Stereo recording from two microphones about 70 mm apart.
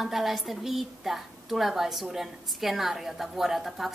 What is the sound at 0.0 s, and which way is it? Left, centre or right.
A woman's voice, centre.